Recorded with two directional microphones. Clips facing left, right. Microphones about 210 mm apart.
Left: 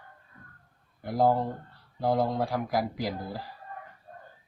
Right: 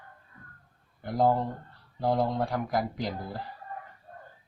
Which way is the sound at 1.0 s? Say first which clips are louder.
Left 1 dB; 5° left (ahead or behind).